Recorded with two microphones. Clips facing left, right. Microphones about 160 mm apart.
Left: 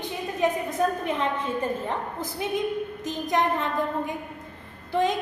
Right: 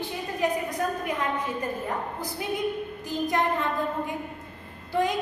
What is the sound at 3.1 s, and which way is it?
A woman's voice, 20° left (ahead or behind).